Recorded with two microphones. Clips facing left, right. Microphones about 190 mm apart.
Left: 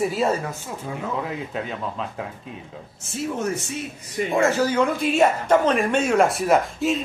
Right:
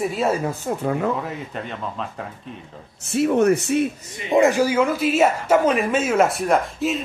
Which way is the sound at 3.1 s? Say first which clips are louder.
Right 9 dB; 65° right (ahead or behind).